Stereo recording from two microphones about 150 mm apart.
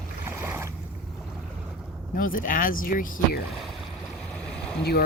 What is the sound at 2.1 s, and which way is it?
Speech, 70° left (ahead or behind).